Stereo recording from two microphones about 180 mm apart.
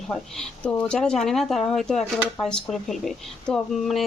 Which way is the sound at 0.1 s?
5° left (ahead or behind).